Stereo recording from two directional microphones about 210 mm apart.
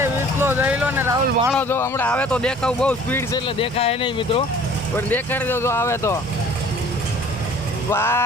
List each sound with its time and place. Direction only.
0.0 s speech: 10° right (ahead or behind)
1.5 s speech: 10° left (ahead or behind)
3.4 s speech: 25° left (ahead or behind)
4.9 s speech: 10° left (ahead or behind)
7.9 s speech: 10° left (ahead or behind)